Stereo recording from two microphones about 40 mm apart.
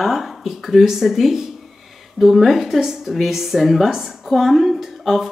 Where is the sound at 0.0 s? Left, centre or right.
Centre.